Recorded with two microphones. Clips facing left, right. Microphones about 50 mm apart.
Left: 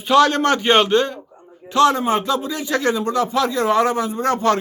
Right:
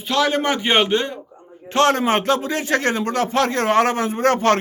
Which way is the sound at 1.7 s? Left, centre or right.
Right.